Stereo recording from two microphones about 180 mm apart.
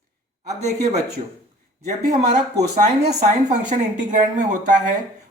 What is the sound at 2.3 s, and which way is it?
Speech, 40° right (ahead or behind).